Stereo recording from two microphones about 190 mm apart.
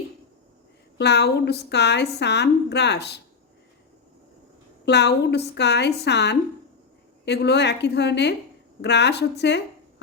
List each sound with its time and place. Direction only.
0.9 s a woman's voice: 60° left (ahead or behind)
4.9 s a woman's voice: 65° left (ahead or behind)